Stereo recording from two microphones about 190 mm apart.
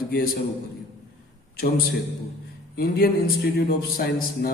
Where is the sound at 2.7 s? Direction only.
50° left (ahead or behind).